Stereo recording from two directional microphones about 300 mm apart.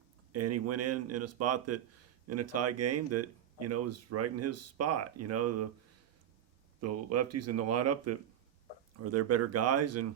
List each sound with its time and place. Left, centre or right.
0.3 s speech: right
6.8 s speech: right